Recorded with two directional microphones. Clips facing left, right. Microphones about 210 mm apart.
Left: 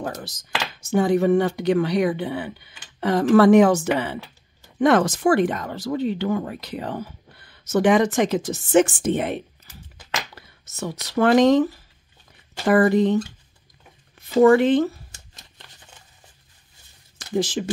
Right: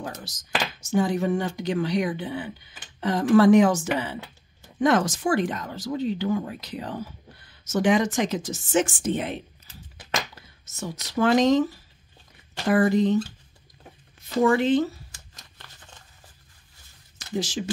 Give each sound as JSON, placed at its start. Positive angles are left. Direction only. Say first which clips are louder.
{"t": 0.0, "sound": "speech", "louder": "left 5 dB", "side_deg": 60}
{"t": 14.4, "sound": "speech", "louder": "left 5 dB", "side_deg": 60}
{"t": 17.4, "sound": "speech", "louder": "left 5 dB", "side_deg": 55}